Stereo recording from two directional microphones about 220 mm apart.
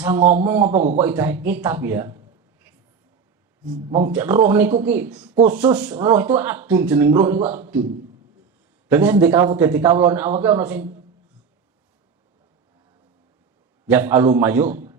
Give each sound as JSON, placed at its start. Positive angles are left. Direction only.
{"t": 0.2, "sound": "a man's voice", "side_deg": -35}
{"t": 0.4, "sound": "speech", "side_deg": -10}
{"t": 0.7, "sound": "a man's voice", "side_deg": -35}
{"t": 0.9, "sound": "speech", "side_deg": -10}
{"t": 4.0, "sound": "a man's voice", "side_deg": -10}
{"t": 8.9, "sound": "speech", "side_deg": -10}
{"t": 13.8, "sound": "speech", "side_deg": -10}